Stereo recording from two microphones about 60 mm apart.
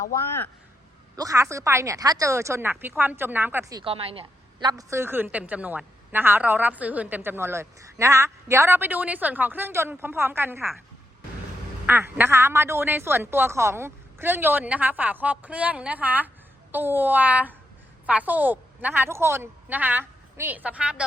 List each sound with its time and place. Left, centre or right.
1.1 s speech: right
2.3 s speech: right
2.6 s a woman's voice: right
4.9 s a woman's voice: right
7.2 s a woman's voice: right
11.9 s a woman's voice: right
19.6 s a woman's voice: right